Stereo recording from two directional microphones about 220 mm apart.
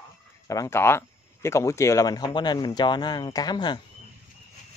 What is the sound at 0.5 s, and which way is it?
Speech, 15° left (ahead or behind).